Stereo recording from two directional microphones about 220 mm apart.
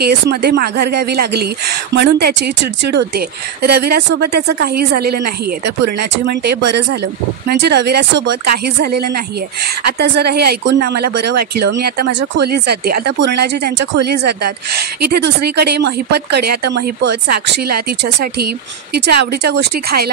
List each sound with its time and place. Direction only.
0.0 s speech: 45° right (ahead or behind)